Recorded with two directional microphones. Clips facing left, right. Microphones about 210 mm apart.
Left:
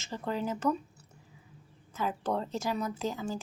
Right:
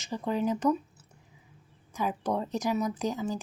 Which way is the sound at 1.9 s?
15° right (ahead or behind).